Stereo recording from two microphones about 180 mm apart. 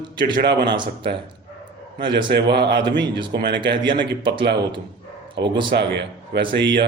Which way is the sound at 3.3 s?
70° right (ahead or behind).